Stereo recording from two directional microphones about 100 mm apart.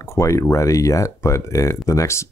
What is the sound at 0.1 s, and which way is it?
Speech, 30° left (ahead or behind).